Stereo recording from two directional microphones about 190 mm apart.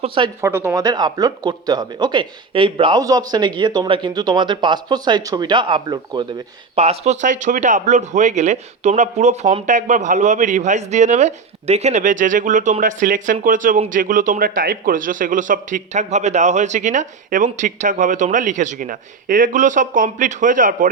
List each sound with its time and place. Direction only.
0.0 s speech: 25° right (ahead or behind)
0.4 s speech: 15° right (ahead or behind); by 20.9 s 45° right (ahead or behind)